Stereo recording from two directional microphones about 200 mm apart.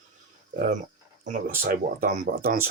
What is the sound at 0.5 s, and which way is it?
Speech, 45° right (ahead or behind).